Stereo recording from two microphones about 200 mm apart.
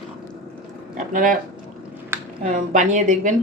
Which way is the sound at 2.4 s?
40° right (ahead or behind).